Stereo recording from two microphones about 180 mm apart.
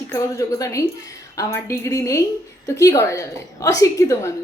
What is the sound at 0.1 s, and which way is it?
A woman's voice, 15° left (ahead or behind).